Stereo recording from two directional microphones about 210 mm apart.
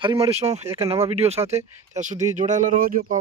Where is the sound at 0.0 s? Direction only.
25° right (ahead or behind).